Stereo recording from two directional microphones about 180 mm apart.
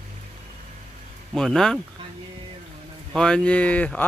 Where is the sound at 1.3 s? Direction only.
Centre (ahead or behind).